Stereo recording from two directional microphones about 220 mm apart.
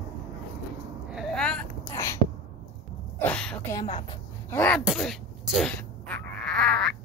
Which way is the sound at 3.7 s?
25° left (ahead or behind).